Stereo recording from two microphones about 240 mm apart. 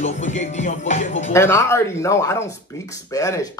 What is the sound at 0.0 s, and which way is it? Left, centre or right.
Speech, left.